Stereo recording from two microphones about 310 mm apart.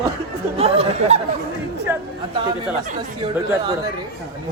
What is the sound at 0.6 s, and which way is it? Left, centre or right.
Speech, centre.